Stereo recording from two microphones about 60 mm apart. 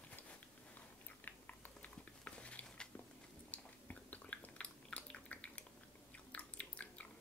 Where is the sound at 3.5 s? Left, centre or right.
Left.